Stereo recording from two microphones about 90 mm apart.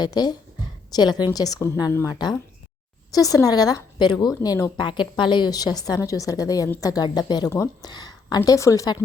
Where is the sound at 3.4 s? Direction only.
45° left (ahead or behind).